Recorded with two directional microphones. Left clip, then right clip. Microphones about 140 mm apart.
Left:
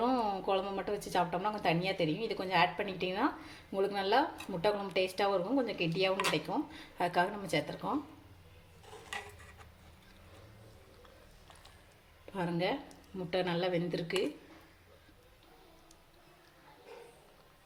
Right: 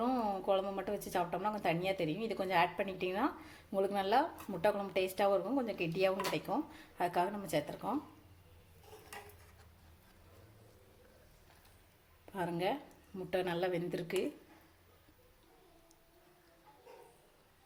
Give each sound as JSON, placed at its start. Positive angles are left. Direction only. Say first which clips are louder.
{"t": 0.0, "sound": "speech", "louder": "left 3 dB", "side_deg": -15}
{"t": 12.3, "sound": "speech", "louder": "left 2 dB", "side_deg": -15}